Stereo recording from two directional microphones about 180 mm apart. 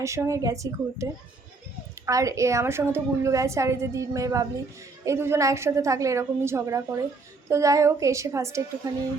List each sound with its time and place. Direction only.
0.0 s a woman's voice: 15° right (ahead or behind)
2.0 s a woman's voice: 20° right (ahead or behind)